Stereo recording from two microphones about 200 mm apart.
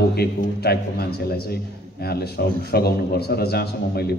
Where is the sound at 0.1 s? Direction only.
50° left (ahead or behind).